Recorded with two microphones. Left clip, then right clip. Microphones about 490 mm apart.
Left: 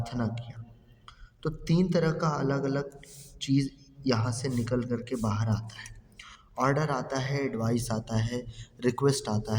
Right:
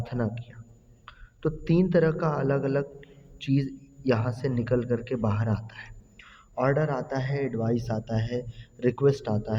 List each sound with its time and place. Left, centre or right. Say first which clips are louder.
0.0 s a man's voice: right 3 dB; right